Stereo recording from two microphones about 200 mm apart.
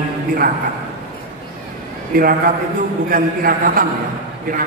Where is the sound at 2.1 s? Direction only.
45° right (ahead or behind).